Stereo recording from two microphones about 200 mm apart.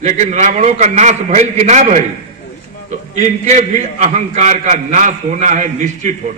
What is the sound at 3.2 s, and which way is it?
A man's voice, 35° right (ahead or behind).